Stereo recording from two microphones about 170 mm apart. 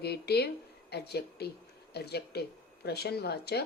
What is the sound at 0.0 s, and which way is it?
A woman's voice, 70° left (ahead or behind).